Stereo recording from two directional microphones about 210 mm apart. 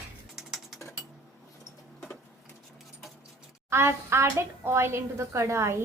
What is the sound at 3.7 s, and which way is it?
Dishes, 10° right (ahead or behind).